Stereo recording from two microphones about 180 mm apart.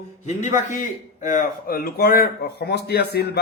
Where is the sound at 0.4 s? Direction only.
45° left (ahead or behind).